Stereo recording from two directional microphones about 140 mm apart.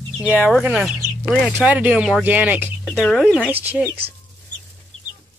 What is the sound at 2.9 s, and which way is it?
Speech, 5° left (ahead or behind).